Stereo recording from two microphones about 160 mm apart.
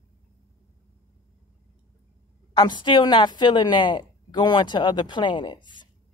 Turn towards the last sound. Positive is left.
turn(degrees=30)  # may be behind; listen again after turning